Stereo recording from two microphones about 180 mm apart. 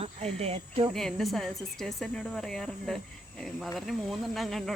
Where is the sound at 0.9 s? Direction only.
Centre (ahead or behind).